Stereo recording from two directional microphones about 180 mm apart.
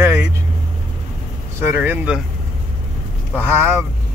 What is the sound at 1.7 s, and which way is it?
Speech, 10° right (ahead or behind).